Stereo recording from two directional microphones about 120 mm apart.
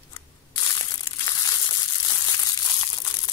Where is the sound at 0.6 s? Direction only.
30° left (ahead or behind).